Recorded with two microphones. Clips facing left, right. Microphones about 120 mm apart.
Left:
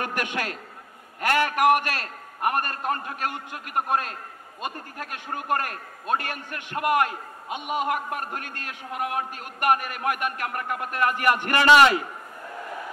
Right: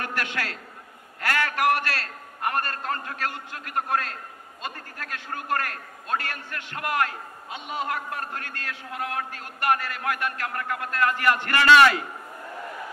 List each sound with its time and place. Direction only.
0.0 s a man's voice: 15° left (ahead or behind)